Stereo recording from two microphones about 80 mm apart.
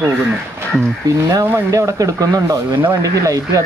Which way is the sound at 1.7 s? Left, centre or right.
Right.